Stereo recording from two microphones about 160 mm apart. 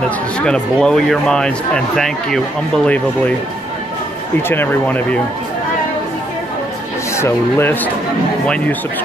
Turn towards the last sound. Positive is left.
turn(degrees=15)  # may be behind; listen again after turning